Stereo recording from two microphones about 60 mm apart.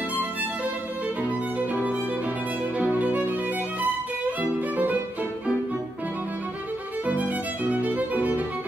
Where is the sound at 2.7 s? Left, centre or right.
Right.